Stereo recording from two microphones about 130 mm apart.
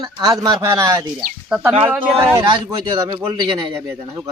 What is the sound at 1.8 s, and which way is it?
A man's voice, 15° right (ahead or behind).